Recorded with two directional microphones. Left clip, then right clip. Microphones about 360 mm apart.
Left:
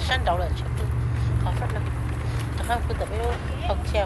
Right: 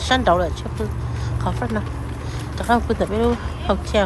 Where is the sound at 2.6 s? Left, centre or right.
Centre.